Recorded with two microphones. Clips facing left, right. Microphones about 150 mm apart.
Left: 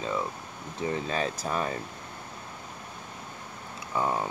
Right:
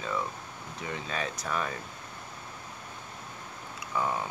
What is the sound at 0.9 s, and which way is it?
Speech, 35° left (ahead or behind).